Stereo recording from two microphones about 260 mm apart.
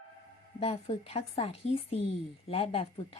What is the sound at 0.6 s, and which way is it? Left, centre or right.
Speech, left.